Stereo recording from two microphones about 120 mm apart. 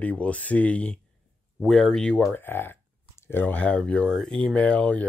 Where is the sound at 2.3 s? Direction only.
20° left (ahead or behind).